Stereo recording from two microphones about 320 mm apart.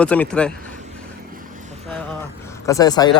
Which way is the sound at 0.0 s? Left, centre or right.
Centre.